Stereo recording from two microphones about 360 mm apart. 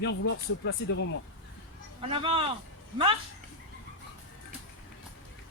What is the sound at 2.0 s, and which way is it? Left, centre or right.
Speech, centre.